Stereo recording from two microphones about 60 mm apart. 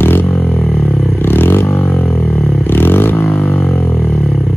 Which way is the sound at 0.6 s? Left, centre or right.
Centre.